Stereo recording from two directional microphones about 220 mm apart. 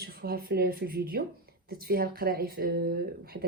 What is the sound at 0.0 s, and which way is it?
Speech, 45° right (ahead or behind).